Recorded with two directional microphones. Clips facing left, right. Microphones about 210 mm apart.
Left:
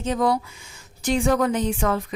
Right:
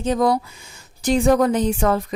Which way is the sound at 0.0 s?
40° right (ahead or behind).